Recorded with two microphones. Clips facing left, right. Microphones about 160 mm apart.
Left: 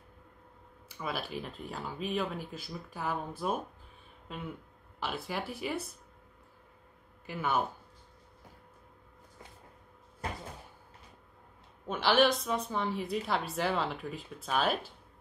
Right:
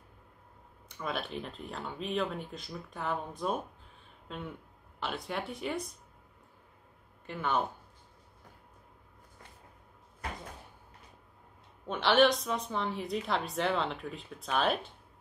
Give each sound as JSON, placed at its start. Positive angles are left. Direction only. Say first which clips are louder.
{"t": 0.8, "sound": "a woman's voice", "louder": "right 1 dB", "side_deg": 5}
{"t": 7.2, "sound": "speech", "louder": "even", "side_deg": 5}
{"t": 11.9, "sound": "a woman's voice", "louder": "right 1 dB", "side_deg": 0}